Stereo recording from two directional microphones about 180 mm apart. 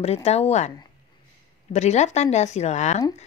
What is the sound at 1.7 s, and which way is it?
Speech, 40° left (ahead or behind).